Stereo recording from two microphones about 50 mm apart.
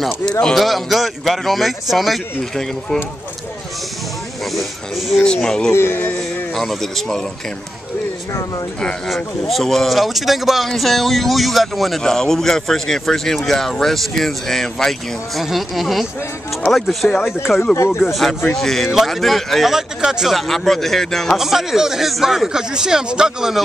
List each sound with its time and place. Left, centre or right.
0.2 s speech: centre
0.6 s a man's voice: centre
4.6 s a man's voice: centre
5.2 s speech: centre
5.7 s speech: left
6.5 s a man's voice: centre
9.1 s a man's voice: centre
17.4 s speech: left
18.0 s a man's voice: centre
20.0 s speech: centre
20.3 s speech: centre
21.4 s speech: centre